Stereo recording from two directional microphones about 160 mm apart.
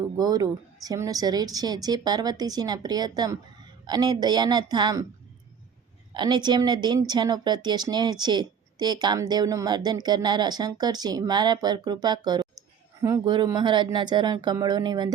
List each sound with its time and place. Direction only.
0.2 s speech: 25° right (ahead or behind)
6.1 s speech: 25° right (ahead or behind)